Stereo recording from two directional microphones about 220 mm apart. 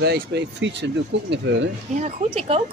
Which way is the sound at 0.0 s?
50° right (ahead or behind).